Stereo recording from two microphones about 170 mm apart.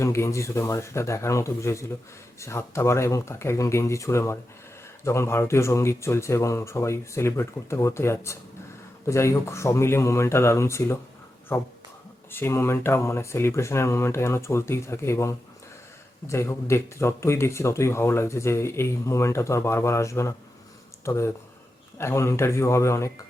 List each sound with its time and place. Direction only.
0.0 s speech: 15° left (ahead or behind)
12.3 s speech: 15° left (ahead or behind)